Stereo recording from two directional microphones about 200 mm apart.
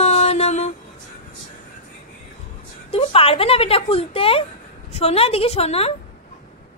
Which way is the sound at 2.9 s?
30° left (ahead or behind).